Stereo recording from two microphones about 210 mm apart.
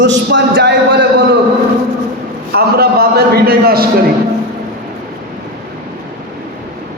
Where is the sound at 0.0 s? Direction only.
60° right (ahead or behind).